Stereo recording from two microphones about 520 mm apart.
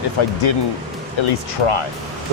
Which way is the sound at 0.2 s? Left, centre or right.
Left.